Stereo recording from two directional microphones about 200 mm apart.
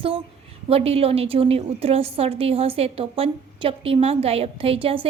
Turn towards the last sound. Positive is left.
turn(degrees=-25)  # may be behind; listen again after turning